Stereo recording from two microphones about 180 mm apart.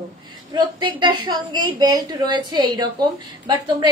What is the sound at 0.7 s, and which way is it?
A woman's voice, 25° right (ahead or behind).